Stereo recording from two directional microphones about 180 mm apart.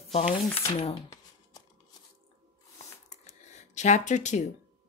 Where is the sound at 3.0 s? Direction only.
40° left (ahead or behind).